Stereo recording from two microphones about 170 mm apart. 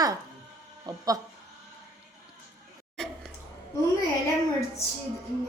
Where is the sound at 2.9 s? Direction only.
5° left (ahead or behind).